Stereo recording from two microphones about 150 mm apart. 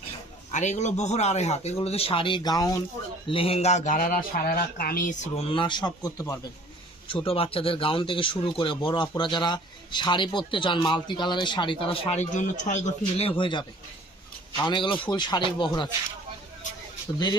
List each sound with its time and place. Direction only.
0.5 s speech: 55° left (ahead or behind); by 2.8 s 25° left (ahead or behind)
3.2 s speech: 40° left (ahead or behind); by 5.1 s 80° left
5.2 s speech: 40° left (ahead or behind); by 6.4 s 20° left (ahead or behind)
7.1 s speech: 40° left (ahead or behind)
17.1 s speech: 25° left (ahead or behind)